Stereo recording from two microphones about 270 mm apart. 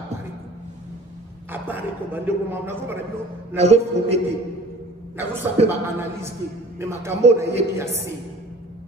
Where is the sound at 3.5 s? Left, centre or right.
Right.